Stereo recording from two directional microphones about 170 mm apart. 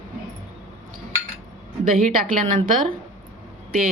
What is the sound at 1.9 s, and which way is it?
Speech, 55° right (ahead or behind).